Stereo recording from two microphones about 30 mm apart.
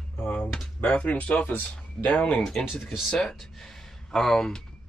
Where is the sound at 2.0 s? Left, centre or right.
Left.